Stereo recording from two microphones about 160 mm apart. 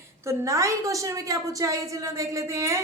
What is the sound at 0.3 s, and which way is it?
Speech, 20° right (ahead or behind).